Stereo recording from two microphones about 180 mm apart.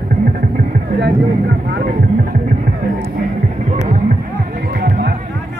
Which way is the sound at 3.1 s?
40° right (ahead or behind).